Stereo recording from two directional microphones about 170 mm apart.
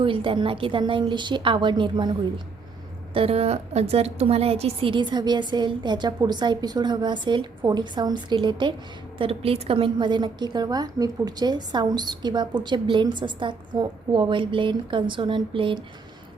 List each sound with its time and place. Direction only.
0.0 s a woman's voice: 30° right (ahead or behind)
3.2 s a woman's voice: 35° right (ahead or behind)